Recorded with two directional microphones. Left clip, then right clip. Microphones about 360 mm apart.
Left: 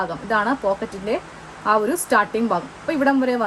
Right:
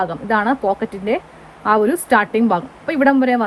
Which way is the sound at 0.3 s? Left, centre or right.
Centre.